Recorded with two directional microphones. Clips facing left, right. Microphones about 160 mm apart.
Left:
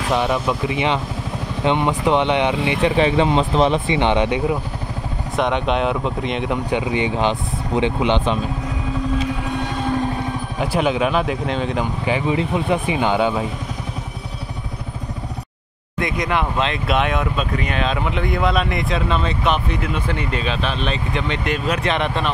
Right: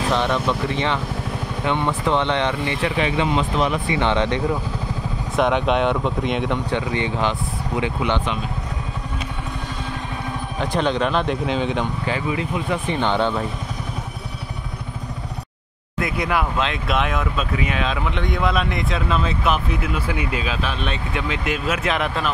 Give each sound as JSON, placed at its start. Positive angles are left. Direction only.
{"t": 0.1, "sound": "speech", "side_deg": 10}
{"t": 3.0, "sound": "speech", "side_deg": 30}
{"t": 5.3, "sound": "speech", "side_deg": 0}
{"t": 6.7, "sound": "speech", "side_deg": 15}
{"t": 10.6, "sound": "speech", "side_deg": 5}
{"t": 12.1, "sound": "speech", "side_deg": 25}
{"t": 12.7, "sound": "speech", "side_deg": 10}
{"t": 16.0, "sound": "speech", "side_deg": -5}